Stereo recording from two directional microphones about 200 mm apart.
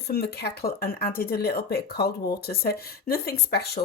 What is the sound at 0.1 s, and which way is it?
Speech, 50° left (ahead or behind).